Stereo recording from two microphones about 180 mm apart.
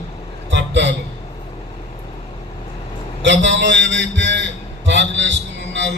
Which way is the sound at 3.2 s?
85° right.